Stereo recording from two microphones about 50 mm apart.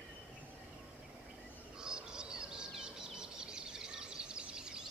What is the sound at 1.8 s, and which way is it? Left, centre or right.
Bird, centre.